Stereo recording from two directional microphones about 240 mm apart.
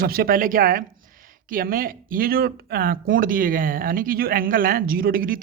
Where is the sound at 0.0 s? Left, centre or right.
Right.